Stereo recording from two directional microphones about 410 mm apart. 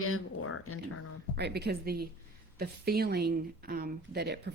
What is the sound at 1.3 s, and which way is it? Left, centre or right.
Speech, right.